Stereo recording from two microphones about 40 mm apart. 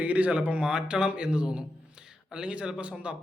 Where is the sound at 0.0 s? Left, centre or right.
Right.